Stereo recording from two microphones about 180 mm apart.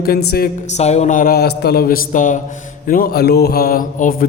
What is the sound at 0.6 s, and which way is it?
Speech, 40° left (ahead or behind).